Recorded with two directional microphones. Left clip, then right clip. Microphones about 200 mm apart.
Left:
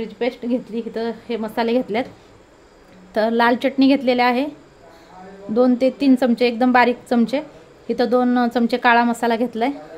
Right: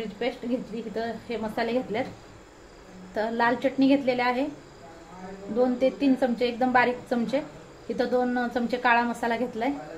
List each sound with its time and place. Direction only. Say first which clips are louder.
0.2 s a woman's voice: left 7 dB; 50° left (ahead or behind)
3.2 s a woman's voice: left 8 dB; 55° left (ahead or behind)
5.6 s a woman's voice: left 7 dB; 50° left (ahead or behind)